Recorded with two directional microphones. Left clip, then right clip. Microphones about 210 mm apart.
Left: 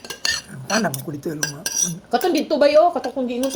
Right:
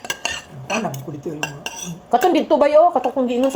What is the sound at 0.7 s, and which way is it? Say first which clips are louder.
Dishes: left 2 dB; 55° left (ahead or behind).